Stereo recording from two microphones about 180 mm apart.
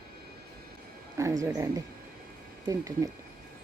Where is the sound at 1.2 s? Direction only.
15° right (ahead or behind).